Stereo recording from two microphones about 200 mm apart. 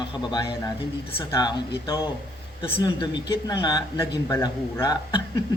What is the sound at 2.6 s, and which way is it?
Speech, 25° left (ahead or behind).